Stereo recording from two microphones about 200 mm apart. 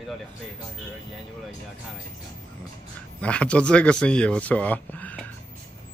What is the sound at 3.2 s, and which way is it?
Speech, 5° left (ahead or behind).